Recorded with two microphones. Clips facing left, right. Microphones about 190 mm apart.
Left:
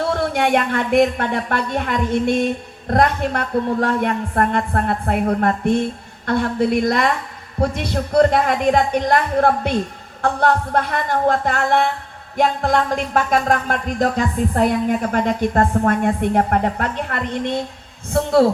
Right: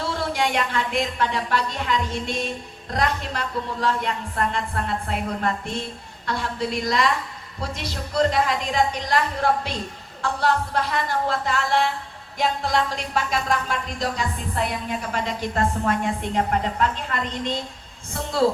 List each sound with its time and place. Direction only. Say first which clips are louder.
0.0 s speech: left 6 dB; 55° left (ahead or behind)